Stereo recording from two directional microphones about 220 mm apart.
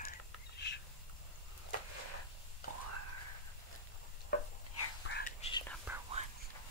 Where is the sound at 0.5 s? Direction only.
50° left (ahead or behind).